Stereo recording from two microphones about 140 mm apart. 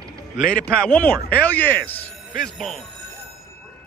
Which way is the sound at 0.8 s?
10° left (ahead or behind).